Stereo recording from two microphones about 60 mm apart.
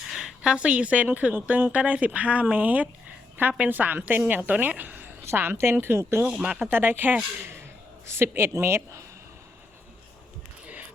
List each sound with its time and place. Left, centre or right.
0.2 s a woman's voice: centre; by 5.0 s right
5.2 s a woman's voice: right
8.0 s a woman's voice: right